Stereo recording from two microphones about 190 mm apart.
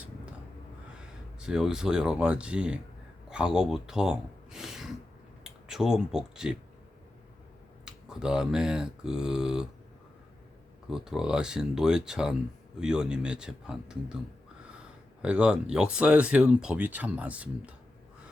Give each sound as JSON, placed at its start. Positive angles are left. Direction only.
{"t": 1.4, "sound": "speech", "side_deg": -5}
{"t": 7.9, "sound": "speech", "side_deg": -5}
{"t": 10.8, "sound": "speech", "side_deg": -5}
{"t": 15.2, "sound": "speech", "side_deg": -5}